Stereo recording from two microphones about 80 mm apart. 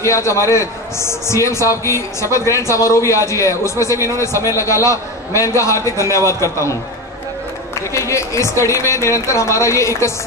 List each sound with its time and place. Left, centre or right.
0.0 s a man's voice: left